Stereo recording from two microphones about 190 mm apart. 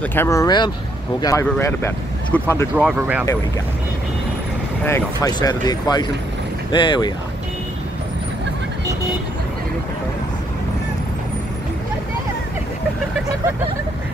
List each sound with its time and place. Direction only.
0.1 s speech: 15° left (ahead or behind)
4.8 s speech: 15° left (ahead or behind)